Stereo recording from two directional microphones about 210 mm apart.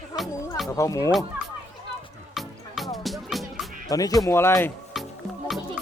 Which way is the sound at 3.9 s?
15° left (ahead or behind).